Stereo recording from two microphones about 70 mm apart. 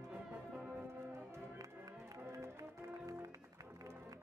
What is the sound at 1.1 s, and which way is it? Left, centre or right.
Music, right.